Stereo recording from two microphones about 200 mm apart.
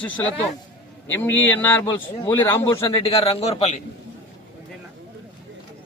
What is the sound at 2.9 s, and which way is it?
Speech, 30° left (ahead or behind).